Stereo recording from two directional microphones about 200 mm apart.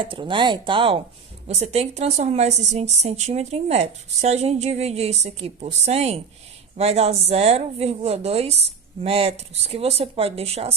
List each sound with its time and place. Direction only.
0.0 s a woman's voice: 25° right (ahead or behind)